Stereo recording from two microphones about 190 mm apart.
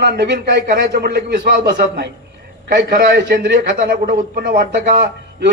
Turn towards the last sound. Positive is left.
turn(degrees=-60)  # may be behind; listen again after turning